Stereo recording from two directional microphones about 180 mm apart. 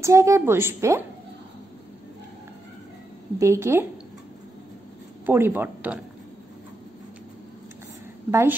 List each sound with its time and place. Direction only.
0.0 s a woman's voice: 15° right (ahead or behind)
3.3 s a woman's voice: 15° right (ahead or behind)
5.2 s a woman's voice: 10° right (ahead or behind)
8.3 s a woman's voice: 15° right (ahead or behind)